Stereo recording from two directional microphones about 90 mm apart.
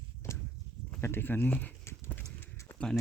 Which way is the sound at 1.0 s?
25° left (ahead or behind).